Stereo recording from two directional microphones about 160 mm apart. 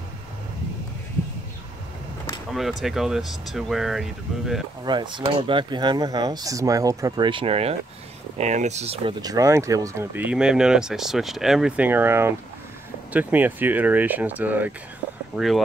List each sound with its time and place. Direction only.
2.5 s speech: centre (ahead or behind)
4.8 s speech: 30° right (ahead or behind)
9.2 s speech: 20° right (ahead or behind); by 15.6 s centre (ahead or behind)